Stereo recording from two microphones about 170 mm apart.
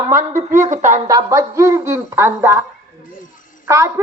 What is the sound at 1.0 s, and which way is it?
A woman's voice, 20° right (ahead or behind).